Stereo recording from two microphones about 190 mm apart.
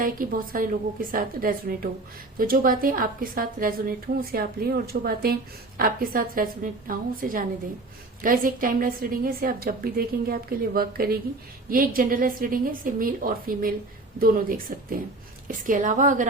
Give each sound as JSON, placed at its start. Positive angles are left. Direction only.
{"t": 0.0, "sound": "a woman's voice", "side_deg": -45}